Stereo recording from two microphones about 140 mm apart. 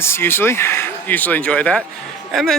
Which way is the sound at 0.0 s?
15° left (ahead or behind).